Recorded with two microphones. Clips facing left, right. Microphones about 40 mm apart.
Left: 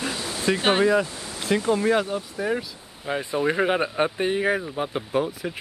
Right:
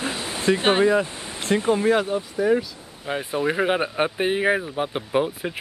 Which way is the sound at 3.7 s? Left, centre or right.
Centre.